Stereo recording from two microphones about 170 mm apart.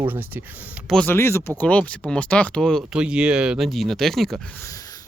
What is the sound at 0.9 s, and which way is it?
Speech, 10° left (ahead or behind).